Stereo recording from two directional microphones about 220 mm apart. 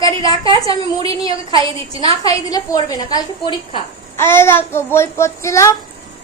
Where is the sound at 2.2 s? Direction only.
15° left (ahead or behind).